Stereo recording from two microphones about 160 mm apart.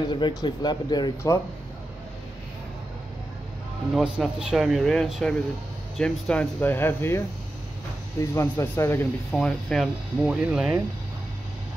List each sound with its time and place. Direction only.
0.1 s speech: 25° left (ahead or behind)
3.9 s speech: 5° right (ahead or behind); by 9.0 s 15° left (ahead or behind)
9.3 s speech: 5° left (ahead or behind)